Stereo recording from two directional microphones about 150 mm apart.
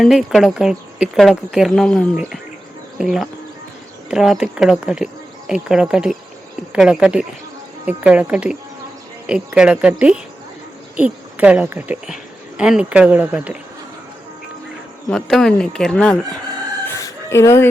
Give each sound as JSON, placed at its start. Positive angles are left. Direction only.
{"t": 0.0, "sound": "speech", "side_deg": 0}
{"t": 15.1, "sound": "speech", "side_deg": 5}
{"t": 16.8, "sound": "music", "side_deg": 15}